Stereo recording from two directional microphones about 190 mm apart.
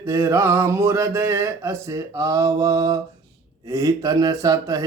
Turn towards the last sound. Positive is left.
turn(degrees=-20)  # may be behind; listen again after turning